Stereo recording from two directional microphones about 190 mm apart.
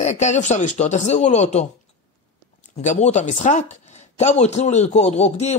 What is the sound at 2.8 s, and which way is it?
A man's voice, 35° left (ahead or behind).